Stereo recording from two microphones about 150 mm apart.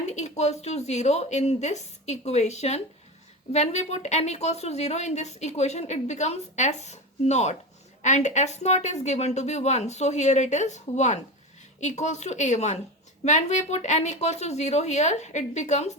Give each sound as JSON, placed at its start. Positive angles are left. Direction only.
{"t": 0.0, "sound": "a woman's voice", "side_deg": 50}